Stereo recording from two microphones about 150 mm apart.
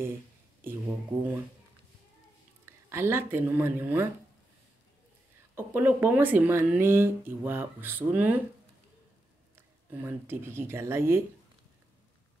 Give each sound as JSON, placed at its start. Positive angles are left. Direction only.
{"t": 1.1, "sound": "speech", "side_deg": -35}
{"t": 2.6, "sound": "speech", "side_deg": -15}
{"t": 5.6, "sound": "speech", "side_deg": -15}
{"t": 9.6, "sound": "speech", "side_deg": -15}